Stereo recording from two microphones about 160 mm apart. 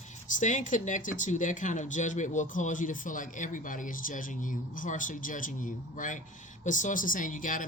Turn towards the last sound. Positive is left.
turn(degrees=55)  # may be behind; listen again after turning